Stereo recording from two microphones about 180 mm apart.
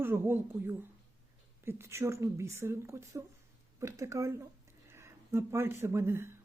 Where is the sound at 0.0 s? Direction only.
15° right (ahead or behind).